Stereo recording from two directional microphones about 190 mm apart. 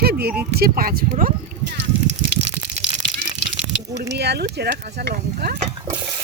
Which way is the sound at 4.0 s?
60° right (ahead or behind).